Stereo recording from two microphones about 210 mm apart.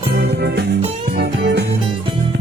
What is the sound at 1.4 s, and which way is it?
Music, 50° right (ahead or behind).